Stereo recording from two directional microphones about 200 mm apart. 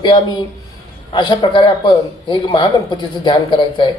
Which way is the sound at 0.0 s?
25° left (ahead or behind).